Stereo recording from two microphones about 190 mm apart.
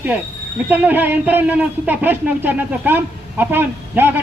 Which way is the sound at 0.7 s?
10° right (ahead or behind).